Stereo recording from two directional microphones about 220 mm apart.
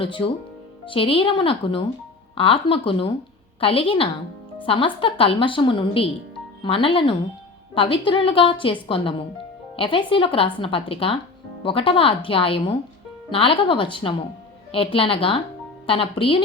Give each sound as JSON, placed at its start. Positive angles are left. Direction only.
{"t": 0.0, "sound": "speech", "side_deg": 20}